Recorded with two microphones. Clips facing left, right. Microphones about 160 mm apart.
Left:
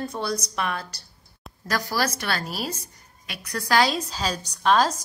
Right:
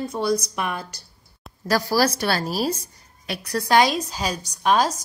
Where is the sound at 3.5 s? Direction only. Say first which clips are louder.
Right 3 dB; 20° right (ahead or behind).